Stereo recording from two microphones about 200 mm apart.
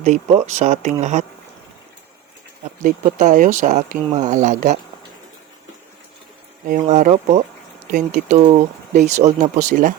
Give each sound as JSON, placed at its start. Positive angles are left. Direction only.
{"t": 0.0, "sound": "speech", "side_deg": -35}
{"t": 2.8, "sound": "speech", "side_deg": -40}
{"t": 6.7, "sound": "speech", "side_deg": -40}
{"t": 8.4, "sound": "speech", "side_deg": -35}